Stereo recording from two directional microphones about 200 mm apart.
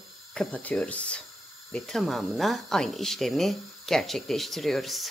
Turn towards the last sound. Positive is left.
turn(degrees=0)  # may be behind; listen again after turning